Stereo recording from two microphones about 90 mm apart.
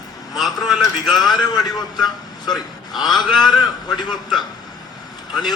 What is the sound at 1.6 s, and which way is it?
A man's voice, 50° left (ahead or behind).